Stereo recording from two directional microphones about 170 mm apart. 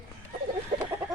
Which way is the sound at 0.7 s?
50° right (ahead or behind).